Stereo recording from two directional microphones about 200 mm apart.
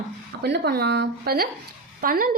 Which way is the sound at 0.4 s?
55° right (ahead or behind).